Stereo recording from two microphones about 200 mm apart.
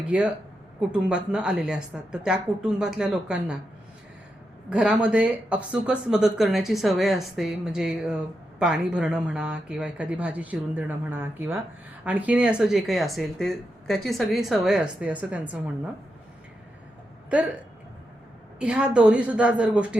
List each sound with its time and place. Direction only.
0.1 s speech: 5° right (ahead or behind)
4.7 s speech: 5° right (ahead or behind)
18.6 s a woman's voice: 5° right (ahead or behind)